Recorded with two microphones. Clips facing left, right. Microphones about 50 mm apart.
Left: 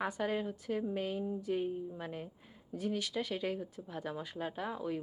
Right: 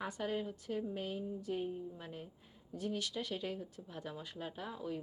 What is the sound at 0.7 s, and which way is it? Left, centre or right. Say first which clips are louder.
Speech: left 3 dB; left.